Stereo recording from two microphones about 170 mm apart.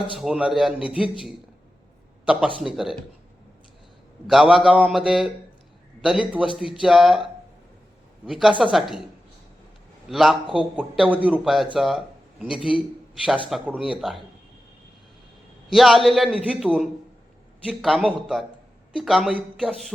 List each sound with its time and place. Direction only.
0.2 s a man's voice: 5° right (ahead or behind)
2.2 s a man's voice: 5° right (ahead or behind)
4.3 s a man's voice: centre (ahead or behind)
8.3 s a man's voice: centre (ahead or behind)
10.1 s a man's voice: centre (ahead or behind)
10.4 s speech: 30° left (ahead or behind)
10.8 s a man's voice: 5° right (ahead or behind)
15.7 s a man's voice: centre (ahead or behind)